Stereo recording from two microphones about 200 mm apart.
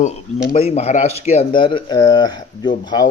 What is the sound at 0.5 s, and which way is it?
Speech, 30° left (ahead or behind).